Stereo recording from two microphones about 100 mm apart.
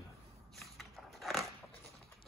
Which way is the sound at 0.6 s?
Centre (ahead or behind).